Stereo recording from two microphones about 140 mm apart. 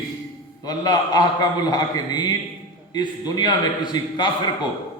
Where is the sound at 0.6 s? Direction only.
30° left (ahead or behind).